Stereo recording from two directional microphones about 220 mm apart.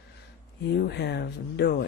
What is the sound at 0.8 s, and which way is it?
Speech, 50° left (ahead or behind).